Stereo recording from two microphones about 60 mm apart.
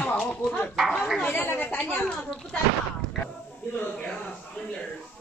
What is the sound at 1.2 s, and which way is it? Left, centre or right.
Speech, left.